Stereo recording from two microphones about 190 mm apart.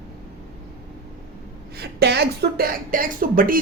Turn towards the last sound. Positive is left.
turn(degrees=-45)  # may be behind; listen again after turning